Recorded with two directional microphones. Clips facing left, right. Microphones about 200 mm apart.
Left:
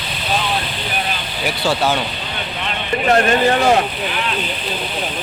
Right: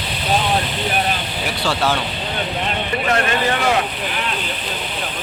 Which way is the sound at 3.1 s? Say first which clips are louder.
Left 6 dB; 30° left (ahead or behind).